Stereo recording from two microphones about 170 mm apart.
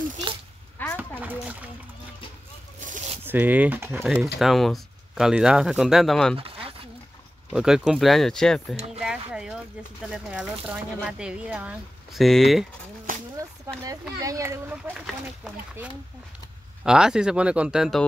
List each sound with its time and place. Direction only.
0.8 s a sound: 10° left (ahead or behind)
1.2 s splash: 10° right (ahead or behind)
3.3 s speech: 10° right (ahead or behind)
6.3 s a sound: 30° right (ahead or behind)
7.5 s speech: 5° right (ahead or behind)
13.1 s a sound: 50° right (ahead or behind)
13.8 s speech: 20° right (ahead or behind)
15.0 s speech: centre (ahead or behind)
16.8 s speech: 5° right (ahead or behind)